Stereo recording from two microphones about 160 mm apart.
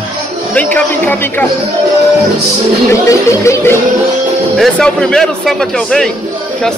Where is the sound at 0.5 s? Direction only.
10° left (ahead or behind).